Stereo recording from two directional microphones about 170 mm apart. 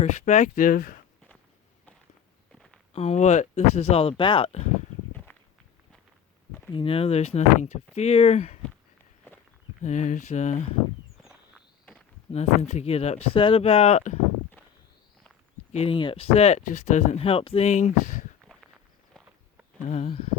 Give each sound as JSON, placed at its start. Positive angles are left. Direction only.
{"t": 0.0, "sound": "speech", "side_deg": 45}
{"t": 2.5, "sound": "a sound", "side_deg": 0}
{"t": 2.9, "sound": "speech", "side_deg": 40}
{"t": 5.1, "sound": "walk", "side_deg": 10}
{"t": 6.7, "sound": "speech", "side_deg": 35}
{"t": 9.8, "sound": "speech", "side_deg": 45}
{"t": 12.3, "sound": "speech", "side_deg": 40}
{"t": 15.7, "sound": "speech", "side_deg": 35}
{"t": 19.9, "sound": "speech", "side_deg": 40}